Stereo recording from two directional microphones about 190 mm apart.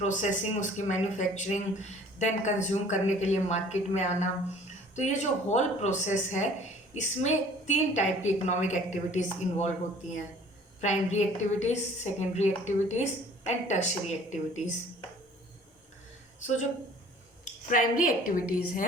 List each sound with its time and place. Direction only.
0.0 s speech: 40° left (ahead or behind)
10.8 s speech: 40° left (ahead or behind)
17.4 s speech: 45° left (ahead or behind)